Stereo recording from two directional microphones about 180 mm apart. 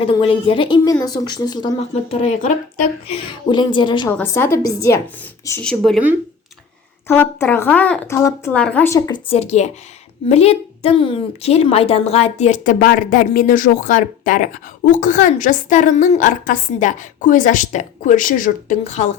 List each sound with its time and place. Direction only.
0.0 s a woman's voice: 30° left (ahead or behind)
1.9 s a woman's voice: 40° left (ahead or behind)
3.1 s a woman's voice: 25° left (ahead or behind)
4.2 s speech: 15° left (ahead or behind)
7.1 s speech: 10° left (ahead or behind)
9.2 s a woman's voice: 35° left (ahead or behind)